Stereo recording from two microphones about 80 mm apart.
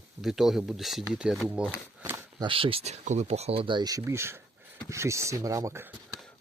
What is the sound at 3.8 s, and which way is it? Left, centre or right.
Speech, right.